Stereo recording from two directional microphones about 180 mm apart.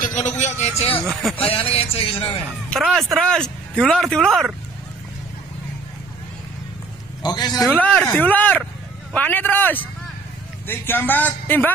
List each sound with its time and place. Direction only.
0.0 s a man's voice: 45° left (ahead or behind)
0.9 s speech: 5° left (ahead or behind)
1.4 s a man's voice: 30° left (ahead or behind)
2.7 s speech: centre (ahead or behind)
7.2 s a man's voice: 20° left (ahead or behind)
7.7 s a man's voice: 5° left (ahead or behind)